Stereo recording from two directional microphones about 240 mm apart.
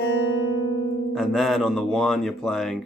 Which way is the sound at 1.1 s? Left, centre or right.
Centre.